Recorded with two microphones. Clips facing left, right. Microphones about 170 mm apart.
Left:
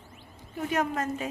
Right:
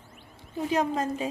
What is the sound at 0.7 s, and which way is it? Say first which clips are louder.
Speech: right 2 dB; 30° right (ahead or behind).